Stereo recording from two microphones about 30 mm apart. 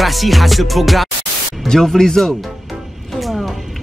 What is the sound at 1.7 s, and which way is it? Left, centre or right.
Speech, centre.